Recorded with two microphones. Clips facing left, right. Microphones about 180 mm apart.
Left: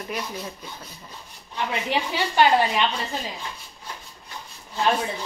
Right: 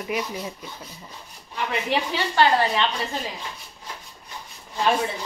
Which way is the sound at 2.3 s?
15° left (ahead or behind).